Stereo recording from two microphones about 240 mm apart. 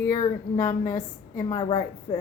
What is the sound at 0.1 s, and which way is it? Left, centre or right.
A woman's voice, centre.